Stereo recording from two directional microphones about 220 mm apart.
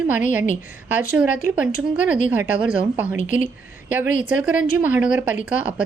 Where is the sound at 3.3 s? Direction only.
35° left (ahead or behind).